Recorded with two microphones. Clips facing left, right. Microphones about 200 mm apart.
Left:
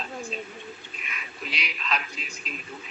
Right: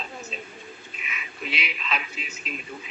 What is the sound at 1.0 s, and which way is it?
Duck, 5° right (ahead or behind).